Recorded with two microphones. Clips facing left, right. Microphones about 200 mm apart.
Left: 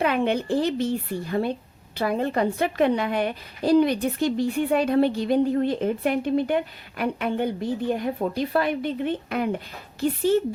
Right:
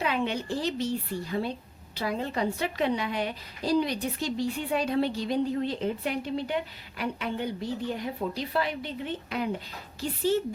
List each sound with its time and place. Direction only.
0.0 s a woman's voice: 55° left (ahead or behind)